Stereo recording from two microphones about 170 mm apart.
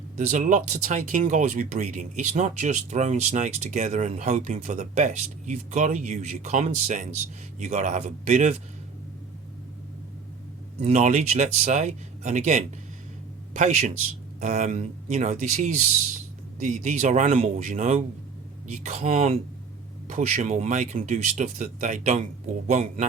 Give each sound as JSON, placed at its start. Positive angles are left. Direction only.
{"t": 0.3, "sound": "speech", "side_deg": -45}
{"t": 10.8, "sound": "a man's voice", "side_deg": -40}